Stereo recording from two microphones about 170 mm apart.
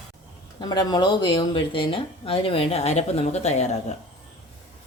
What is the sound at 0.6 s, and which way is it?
Speech, 25° left (ahead or behind).